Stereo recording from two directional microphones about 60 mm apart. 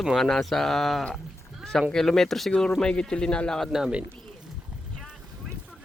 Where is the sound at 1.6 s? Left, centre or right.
Centre.